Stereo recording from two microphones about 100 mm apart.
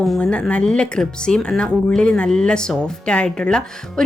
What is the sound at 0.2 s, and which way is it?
Speech, 10° left (ahead or behind).